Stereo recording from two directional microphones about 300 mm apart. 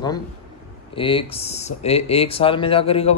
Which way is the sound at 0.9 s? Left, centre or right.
Centre.